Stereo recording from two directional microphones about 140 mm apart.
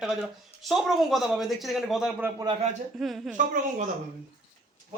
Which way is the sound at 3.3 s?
65° right (ahead or behind).